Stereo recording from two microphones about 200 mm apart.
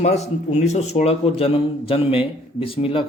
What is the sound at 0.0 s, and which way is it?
Speech, 35° left (ahead or behind).